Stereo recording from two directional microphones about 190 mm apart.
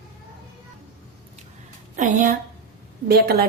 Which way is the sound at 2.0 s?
40° right (ahead or behind).